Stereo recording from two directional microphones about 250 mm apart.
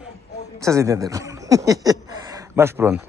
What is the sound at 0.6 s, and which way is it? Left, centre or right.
Speech, centre.